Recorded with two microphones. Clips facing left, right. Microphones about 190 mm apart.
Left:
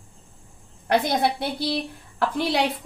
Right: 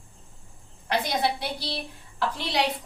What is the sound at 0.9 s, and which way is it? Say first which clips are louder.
A woman's voice: left 5 dB; 55° left (ahead or behind).